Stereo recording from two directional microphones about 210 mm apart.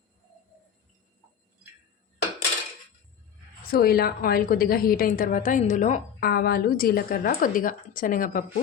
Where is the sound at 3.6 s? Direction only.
45° left (ahead or behind).